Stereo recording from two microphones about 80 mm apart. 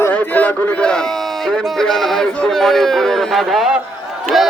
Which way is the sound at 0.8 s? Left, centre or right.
Centre.